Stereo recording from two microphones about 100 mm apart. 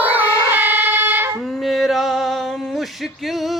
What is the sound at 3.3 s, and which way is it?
Music, centre (ahead or behind).